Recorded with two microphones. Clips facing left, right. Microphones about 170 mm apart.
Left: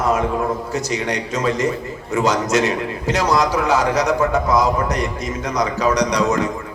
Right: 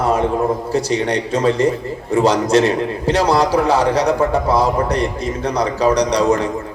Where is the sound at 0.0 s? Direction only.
35° right (ahead or behind).